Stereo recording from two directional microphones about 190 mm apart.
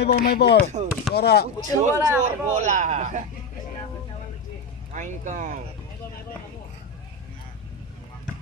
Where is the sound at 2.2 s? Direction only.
40° right (ahead or behind).